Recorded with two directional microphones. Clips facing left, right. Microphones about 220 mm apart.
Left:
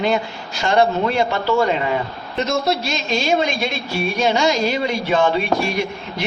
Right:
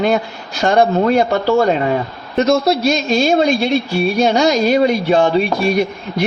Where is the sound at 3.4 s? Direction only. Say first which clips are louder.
Right 8 dB; 35° right (ahead or behind).